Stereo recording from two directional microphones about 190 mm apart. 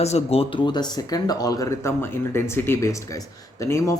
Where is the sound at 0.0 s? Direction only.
35° left (ahead or behind).